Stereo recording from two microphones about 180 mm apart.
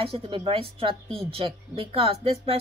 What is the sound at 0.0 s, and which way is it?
Speech, 30° right (ahead or behind).